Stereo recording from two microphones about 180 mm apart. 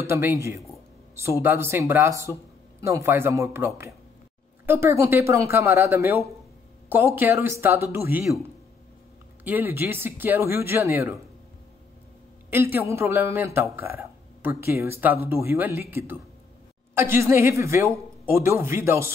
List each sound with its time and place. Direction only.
0.0 s speech: 15° right (ahead or behind)
12.4 s speech: 10° right (ahead or behind)